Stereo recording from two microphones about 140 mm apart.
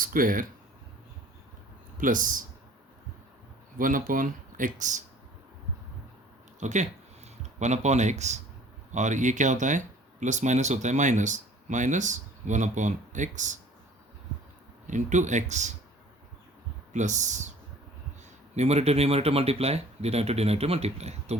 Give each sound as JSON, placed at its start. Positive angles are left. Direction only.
{"t": 0.0, "sound": "speech", "side_deg": -85}
{"t": 2.0, "sound": "speech", "side_deg": -70}
{"t": 3.8, "sound": "speech", "side_deg": -75}
{"t": 6.6, "sound": "speech", "side_deg": -55}
{"t": 14.8, "sound": "speech", "side_deg": -60}
{"t": 16.9, "sound": "speech", "side_deg": -60}
{"t": 18.5, "sound": "speech", "side_deg": -50}